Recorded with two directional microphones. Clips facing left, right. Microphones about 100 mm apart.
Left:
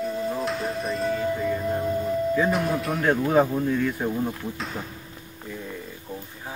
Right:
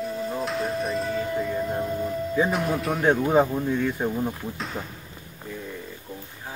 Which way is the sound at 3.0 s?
25° right (ahead or behind).